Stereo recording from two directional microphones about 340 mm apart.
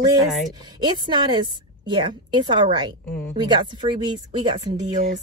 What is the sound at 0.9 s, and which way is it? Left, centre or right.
A woman's voice, centre.